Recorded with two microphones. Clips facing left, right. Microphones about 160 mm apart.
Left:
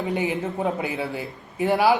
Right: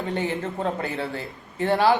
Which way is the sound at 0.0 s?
10° left (ahead or behind).